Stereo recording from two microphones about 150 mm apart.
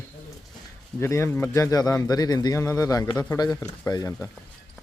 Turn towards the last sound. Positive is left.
turn(degrees=25)  # may be behind; listen again after turning